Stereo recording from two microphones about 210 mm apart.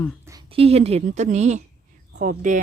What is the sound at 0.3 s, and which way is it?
Speech, 20° right (ahead or behind).